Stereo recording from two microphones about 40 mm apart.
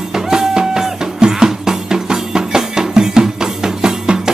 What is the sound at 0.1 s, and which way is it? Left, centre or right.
Music, centre.